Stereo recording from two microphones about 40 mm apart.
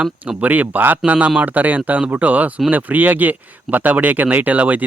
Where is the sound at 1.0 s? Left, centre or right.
Right.